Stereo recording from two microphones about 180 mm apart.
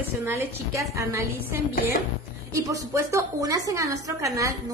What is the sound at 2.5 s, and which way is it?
A woman's voice, 20° right (ahead or behind).